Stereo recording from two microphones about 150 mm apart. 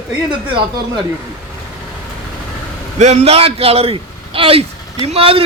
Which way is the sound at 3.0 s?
45° right (ahead or behind).